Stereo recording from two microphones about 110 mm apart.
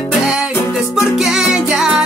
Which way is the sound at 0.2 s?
5° right (ahead or behind).